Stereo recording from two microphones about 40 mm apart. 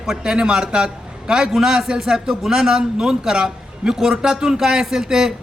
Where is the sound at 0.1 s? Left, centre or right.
Centre.